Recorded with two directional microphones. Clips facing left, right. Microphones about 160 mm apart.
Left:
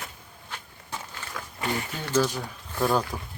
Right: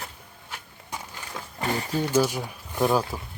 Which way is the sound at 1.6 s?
35° right (ahead or behind).